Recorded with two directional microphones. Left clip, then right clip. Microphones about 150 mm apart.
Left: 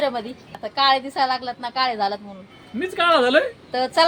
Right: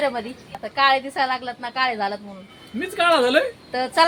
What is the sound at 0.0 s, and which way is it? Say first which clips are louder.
A woman's voice: even; 5° right (ahead or behind).